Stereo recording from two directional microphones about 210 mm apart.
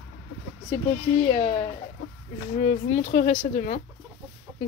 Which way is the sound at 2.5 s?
40° left (ahead or behind).